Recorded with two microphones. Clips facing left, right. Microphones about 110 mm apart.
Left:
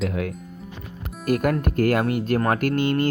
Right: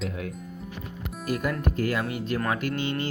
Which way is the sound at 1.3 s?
60° left (ahead or behind).